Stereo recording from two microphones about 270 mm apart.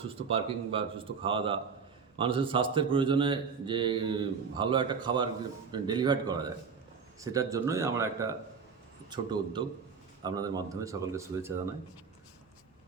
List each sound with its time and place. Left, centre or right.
0.3 s speech: centre